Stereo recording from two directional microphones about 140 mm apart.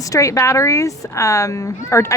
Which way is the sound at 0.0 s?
25° left (ahead or behind).